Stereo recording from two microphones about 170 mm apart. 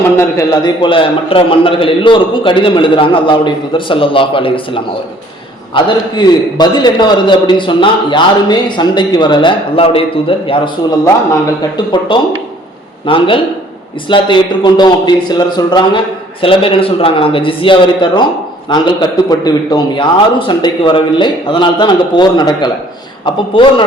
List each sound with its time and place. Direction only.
0.2 s a man's voice: 20° left (ahead or behind)
11.9 s a man's voice: 30° left (ahead or behind)